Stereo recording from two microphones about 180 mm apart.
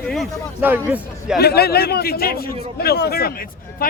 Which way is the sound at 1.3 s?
60° left (ahead or behind).